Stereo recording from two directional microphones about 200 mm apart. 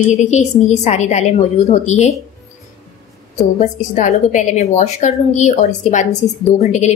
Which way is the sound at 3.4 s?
35° left (ahead or behind).